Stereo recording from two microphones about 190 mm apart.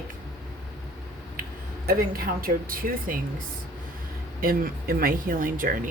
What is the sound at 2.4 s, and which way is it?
Speech, 50° right (ahead or behind).